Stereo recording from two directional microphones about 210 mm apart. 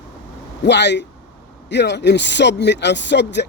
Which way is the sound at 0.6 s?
55° left (ahead or behind).